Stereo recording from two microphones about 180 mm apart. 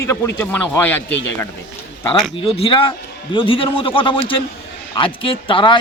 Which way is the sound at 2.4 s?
30° left (ahead or behind).